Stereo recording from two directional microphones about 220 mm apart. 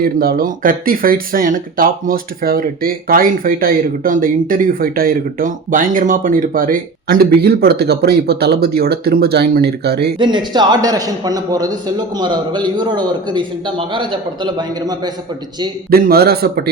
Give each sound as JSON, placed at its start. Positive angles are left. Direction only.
{"t": 0.0, "sound": "speech", "side_deg": -45}
{"t": 10.2, "sound": "a man's voice", "side_deg": -20}
{"t": 15.9, "sound": "speech", "side_deg": -45}